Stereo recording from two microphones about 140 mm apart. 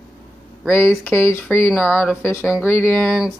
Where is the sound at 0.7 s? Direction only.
15° left (ahead or behind).